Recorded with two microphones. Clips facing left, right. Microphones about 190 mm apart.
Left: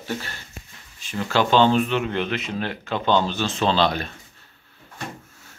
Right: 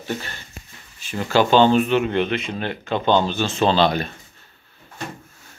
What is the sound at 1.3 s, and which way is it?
Speech, 5° right (ahead or behind).